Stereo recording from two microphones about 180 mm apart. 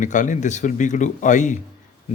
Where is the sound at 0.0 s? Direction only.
45° left (ahead or behind).